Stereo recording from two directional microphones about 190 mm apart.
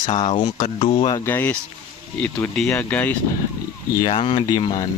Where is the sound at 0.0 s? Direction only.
25° left (ahead or behind).